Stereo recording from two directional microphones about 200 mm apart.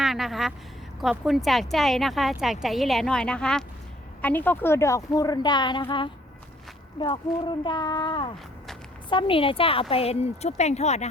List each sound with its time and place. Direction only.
0.0 s a sound: centre (ahead or behind)
1.0 s a woman's voice: centre (ahead or behind); by 5.8 s 20° left (ahead or behind)
7.0 s speech: 25° left (ahead or behind)